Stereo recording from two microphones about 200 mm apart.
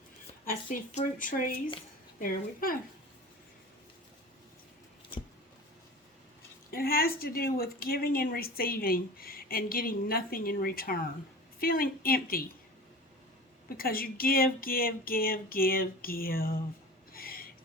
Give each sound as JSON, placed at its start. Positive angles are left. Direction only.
{"t": 0.4, "sound": "speech", "side_deg": 40}
{"t": 6.7, "sound": "speech", "side_deg": 50}
{"t": 13.7, "sound": "speech", "side_deg": 45}
{"t": 17.1, "sound": "a sound", "side_deg": 45}